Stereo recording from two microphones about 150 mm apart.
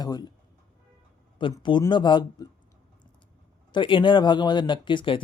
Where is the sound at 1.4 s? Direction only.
30° left (ahead or behind).